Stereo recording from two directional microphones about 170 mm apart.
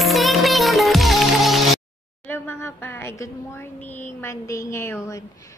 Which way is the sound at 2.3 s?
15° left (ahead or behind).